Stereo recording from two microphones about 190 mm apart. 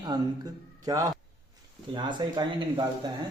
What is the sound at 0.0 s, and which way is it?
A man's voice, 20° right (ahead or behind).